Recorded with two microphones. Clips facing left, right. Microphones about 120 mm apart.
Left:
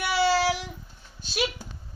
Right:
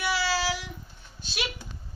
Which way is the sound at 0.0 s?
55° left (ahead or behind).